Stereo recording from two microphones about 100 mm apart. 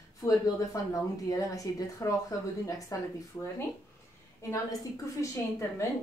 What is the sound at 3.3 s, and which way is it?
Speech, 15° left (ahead or behind).